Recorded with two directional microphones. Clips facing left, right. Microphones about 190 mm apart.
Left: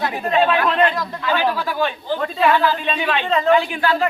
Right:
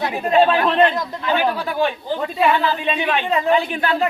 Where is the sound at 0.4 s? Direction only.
25° right (ahead or behind).